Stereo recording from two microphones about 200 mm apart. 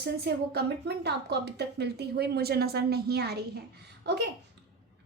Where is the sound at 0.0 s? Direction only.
55° right (ahead or behind).